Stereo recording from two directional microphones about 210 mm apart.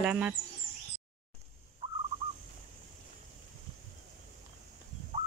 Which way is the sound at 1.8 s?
30° right (ahead or behind).